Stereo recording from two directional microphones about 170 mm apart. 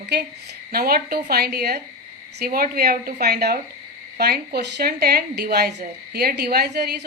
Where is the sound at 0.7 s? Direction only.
60° right (ahead or behind).